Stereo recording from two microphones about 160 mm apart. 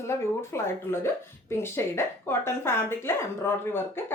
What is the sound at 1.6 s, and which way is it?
A woman's voice, 15° left (ahead or behind).